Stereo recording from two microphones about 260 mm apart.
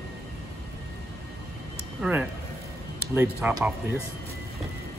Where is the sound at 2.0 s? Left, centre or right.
Centre.